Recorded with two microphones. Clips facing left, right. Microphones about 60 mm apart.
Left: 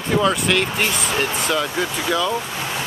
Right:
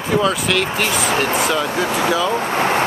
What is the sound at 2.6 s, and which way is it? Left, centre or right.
Vehicle, right.